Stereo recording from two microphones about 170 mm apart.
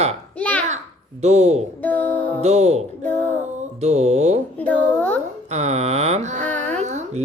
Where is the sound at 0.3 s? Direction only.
10° left (ahead or behind).